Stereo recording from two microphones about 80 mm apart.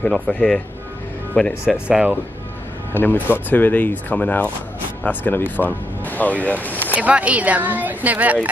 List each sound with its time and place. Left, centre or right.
0.3 s speech: centre
1.9 s speech: centre
2.9 s speech: left
6.9 s speech: centre